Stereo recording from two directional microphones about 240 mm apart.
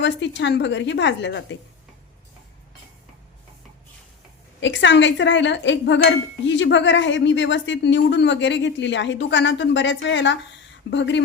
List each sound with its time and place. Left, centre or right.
0.0 s speech: left
4.6 s speech: left